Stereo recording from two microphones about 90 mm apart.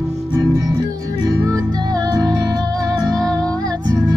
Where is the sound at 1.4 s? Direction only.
45° right (ahead or behind).